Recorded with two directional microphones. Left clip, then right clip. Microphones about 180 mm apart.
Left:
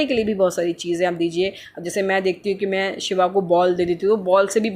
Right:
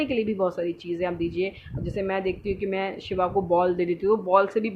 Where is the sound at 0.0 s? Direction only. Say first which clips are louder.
Left 6 dB; 15° left (ahead or behind).